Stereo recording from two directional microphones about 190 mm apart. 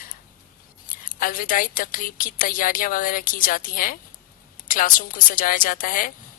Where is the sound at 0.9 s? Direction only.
45° left (ahead or behind).